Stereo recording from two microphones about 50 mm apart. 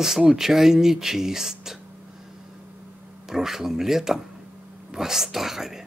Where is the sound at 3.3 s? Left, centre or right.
Centre.